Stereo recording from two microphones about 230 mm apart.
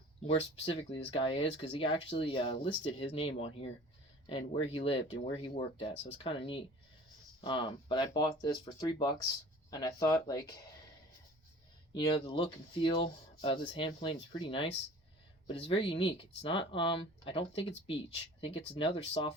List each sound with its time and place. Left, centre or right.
0.3 s speech: left
11.9 s speech: centre